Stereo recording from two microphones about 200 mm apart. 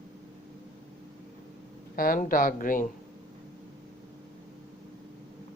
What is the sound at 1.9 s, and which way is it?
Speech, 45° left (ahead or behind).